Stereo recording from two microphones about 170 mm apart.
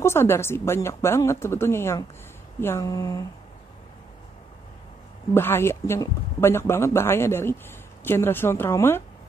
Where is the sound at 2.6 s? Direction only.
20° left (ahead or behind).